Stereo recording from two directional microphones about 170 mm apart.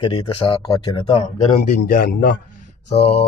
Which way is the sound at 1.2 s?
45° left (ahead or behind).